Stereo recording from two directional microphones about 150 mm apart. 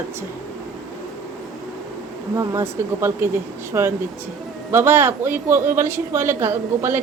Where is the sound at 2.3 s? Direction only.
20° right (ahead or behind).